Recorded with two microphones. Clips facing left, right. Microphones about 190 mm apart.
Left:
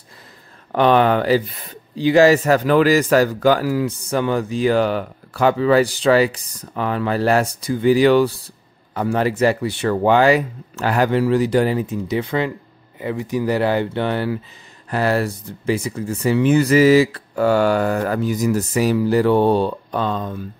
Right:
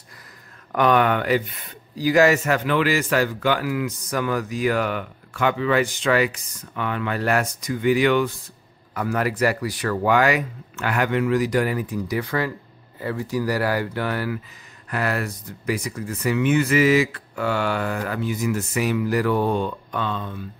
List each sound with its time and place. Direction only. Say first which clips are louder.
0.7 s speech: left 4 dB; 30° left (ahead or behind)